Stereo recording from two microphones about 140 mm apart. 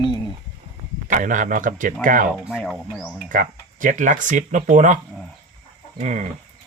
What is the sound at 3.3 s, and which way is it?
Speech, 70° right (ahead or behind).